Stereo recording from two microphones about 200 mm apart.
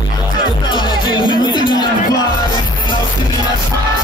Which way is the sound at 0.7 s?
25° left (ahead or behind).